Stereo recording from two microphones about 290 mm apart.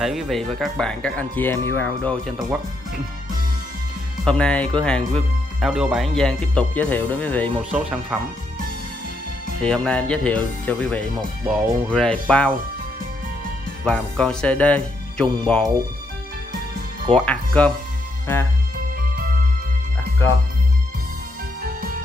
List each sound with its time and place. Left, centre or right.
0.0 s speech: centre
4.2 s speech: centre
9.6 s speech: centre
13.8 s speech: centre
17.1 s speech: centre
18.9 s music: right